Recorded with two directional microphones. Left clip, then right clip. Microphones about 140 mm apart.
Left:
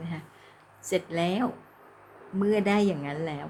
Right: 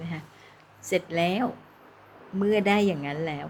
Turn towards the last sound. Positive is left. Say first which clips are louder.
# right 2 dB
turn(degrees=15)  # may be behind; listen again after turning